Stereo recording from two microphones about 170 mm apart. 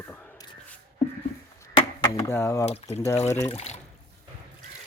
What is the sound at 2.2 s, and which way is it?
Speech, 15° left (ahead or behind).